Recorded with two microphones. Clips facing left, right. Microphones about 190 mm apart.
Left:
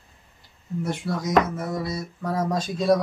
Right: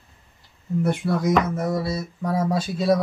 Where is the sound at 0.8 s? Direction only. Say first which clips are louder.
Right 5 dB; 55° right (ahead or behind).